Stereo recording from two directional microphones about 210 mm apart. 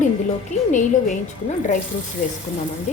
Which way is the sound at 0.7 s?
35° left (ahead or behind).